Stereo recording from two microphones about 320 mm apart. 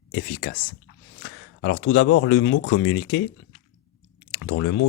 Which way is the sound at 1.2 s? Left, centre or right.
Left.